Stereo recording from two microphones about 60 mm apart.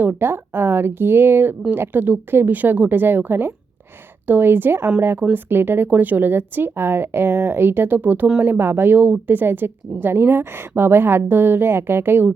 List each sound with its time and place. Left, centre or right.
0.0 s a woman's voice: right